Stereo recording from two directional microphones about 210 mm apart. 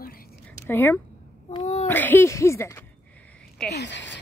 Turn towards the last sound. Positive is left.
turn(degrees=60)  # may be behind; listen again after turning